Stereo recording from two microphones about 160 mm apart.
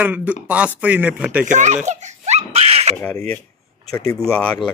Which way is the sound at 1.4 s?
50° right (ahead or behind).